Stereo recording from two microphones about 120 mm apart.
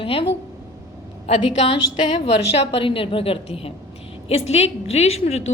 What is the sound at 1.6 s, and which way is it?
A woman's voice, 50° left (ahead or behind).